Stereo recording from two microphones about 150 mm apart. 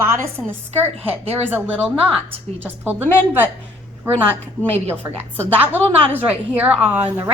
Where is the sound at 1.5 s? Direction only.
15° right (ahead or behind).